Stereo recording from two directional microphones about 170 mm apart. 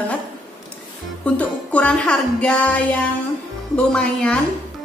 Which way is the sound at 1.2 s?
10° left (ahead or behind).